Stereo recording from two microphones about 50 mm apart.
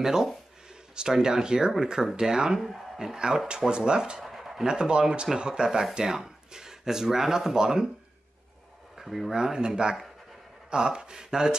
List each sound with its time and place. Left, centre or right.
0.0 s speech: centre
3.2 s speech: centre
4.2 s speech: centre
8.9 s speech: centre